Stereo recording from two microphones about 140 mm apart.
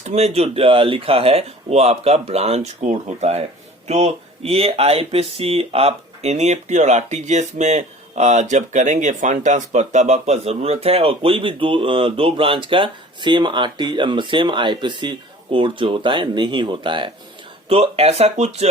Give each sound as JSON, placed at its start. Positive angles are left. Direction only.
{"t": 0.0, "sound": "speech", "side_deg": -50}